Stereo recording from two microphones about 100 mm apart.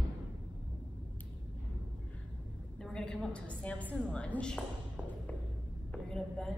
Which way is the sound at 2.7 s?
5° left (ahead or behind).